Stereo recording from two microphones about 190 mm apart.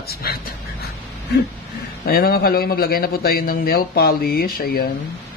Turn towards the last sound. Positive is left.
turn(degrees=55)  # may be behind; listen again after turning